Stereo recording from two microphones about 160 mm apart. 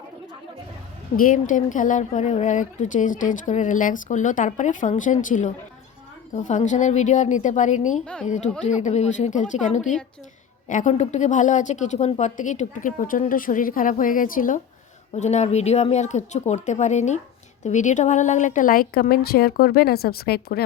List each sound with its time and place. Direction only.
1.1 s speech: 60° left (ahead or behind)
8.0 s a woman's voice: 5° left (ahead or behind)
8.6 s speech: 50° left (ahead or behind)
15.1 s a woman's voice: 45° left (ahead or behind); by 20.7 s 75° left (ahead or behind)